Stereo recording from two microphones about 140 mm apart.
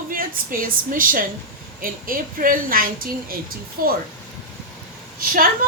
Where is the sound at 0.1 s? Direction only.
80° right.